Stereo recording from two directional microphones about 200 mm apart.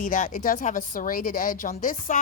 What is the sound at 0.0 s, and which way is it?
Speech, 40° left (ahead or behind).